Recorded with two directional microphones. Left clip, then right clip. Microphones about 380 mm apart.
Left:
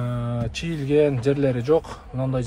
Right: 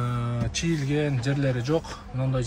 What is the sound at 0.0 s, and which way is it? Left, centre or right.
A man's voice, centre.